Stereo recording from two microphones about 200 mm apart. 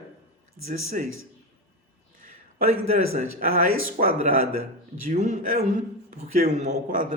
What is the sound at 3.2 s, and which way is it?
A man's voice, 40° right (ahead or behind).